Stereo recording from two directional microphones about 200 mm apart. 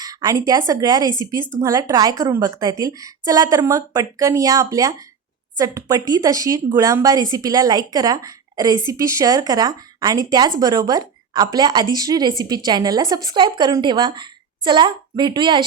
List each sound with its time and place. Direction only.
0.0 s a woman's voice: 15° right (ahead or behind)